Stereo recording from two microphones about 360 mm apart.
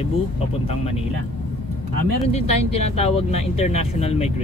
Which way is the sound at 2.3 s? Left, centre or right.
Centre.